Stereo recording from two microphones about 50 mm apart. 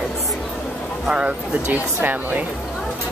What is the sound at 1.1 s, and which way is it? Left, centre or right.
Speech, right.